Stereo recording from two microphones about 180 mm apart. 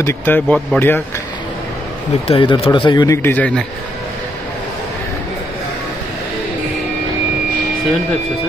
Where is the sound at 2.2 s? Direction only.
30° left (ahead or behind).